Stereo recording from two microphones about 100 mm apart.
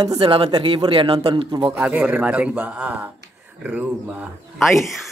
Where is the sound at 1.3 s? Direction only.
50° right (ahead or behind).